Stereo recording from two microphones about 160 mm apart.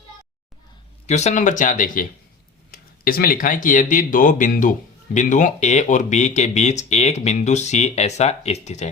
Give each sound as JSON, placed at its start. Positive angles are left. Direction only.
{"t": 1.0, "sound": "speech", "side_deg": 45}
{"t": 2.7, "sound": "speech", "side_deg": 65}